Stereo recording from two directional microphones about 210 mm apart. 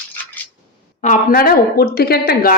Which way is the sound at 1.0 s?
40° left (ahead or behind).